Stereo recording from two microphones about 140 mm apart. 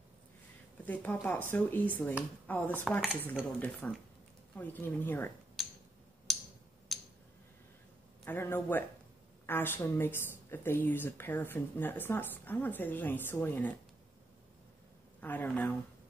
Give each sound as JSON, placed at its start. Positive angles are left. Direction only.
{"t": 0.8, "sound": "speech", "side_deg": 10}
{"t": 5.6, "sound": "a sound", "side_deg": 0}
{"t": 8.3, "sound": "speech", "side_deg": 15}
{"t": 15.1, "sound": "speech", "side_deg": 10}